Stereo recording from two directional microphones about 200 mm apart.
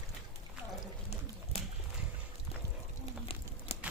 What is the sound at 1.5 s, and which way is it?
Horse, 30° left (ahead or behind).